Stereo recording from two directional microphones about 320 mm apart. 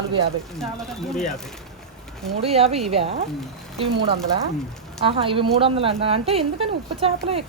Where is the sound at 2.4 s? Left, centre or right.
Centre.